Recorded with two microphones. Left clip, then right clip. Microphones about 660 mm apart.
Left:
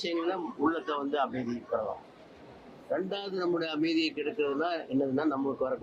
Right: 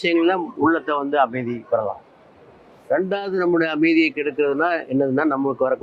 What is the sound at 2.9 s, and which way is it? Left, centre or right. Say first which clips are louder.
A man's voice: right 12 dB; right.